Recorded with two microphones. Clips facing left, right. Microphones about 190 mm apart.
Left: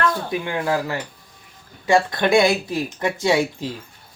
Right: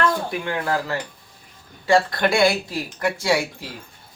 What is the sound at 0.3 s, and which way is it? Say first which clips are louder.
Speech: left 2 dB; 20° left (ahead or behind).